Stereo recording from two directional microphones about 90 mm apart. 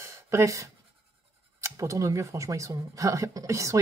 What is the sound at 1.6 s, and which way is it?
Speech, 35° right (ahead or behind).